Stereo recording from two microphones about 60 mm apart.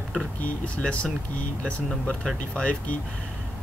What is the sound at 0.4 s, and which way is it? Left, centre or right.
Speech, left.